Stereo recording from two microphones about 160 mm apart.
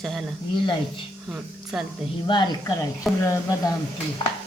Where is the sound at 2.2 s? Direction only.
30° left (ahead or behind).